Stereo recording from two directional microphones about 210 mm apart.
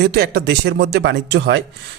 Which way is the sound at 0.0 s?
50° right (ahead or behind).